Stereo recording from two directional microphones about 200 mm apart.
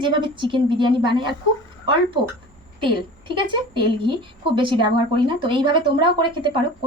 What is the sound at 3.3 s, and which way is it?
A woman's voice, 25° right (ahead or behind).